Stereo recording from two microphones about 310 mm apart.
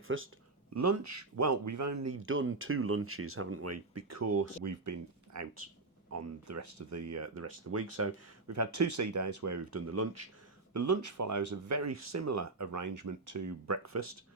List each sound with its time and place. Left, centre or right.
0.1 s speech: right
0.7 s speech: right
2.2 s speech: right